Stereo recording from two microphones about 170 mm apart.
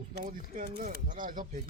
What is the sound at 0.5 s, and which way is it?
Speech, 50° right (ahead or behind).